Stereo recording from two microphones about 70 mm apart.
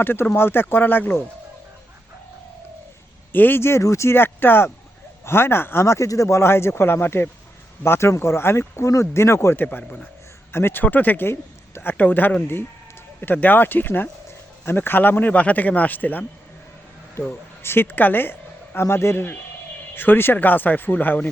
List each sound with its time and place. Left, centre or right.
0.0 s speech: left
3.3 s speech: left
9.6 s a man's voice: left
17.2 s a man's voice: left